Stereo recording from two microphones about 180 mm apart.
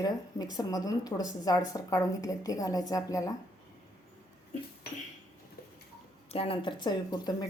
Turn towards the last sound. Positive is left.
turn(degrees=25)  # may be behind; listen again after turning